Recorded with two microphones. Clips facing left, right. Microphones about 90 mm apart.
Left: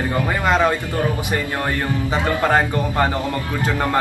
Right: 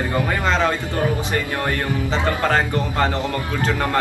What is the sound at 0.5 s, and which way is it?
Speech, 15° left (ahead or behind).